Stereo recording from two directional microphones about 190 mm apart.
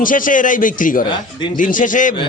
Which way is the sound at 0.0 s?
45° left (ahead or behind).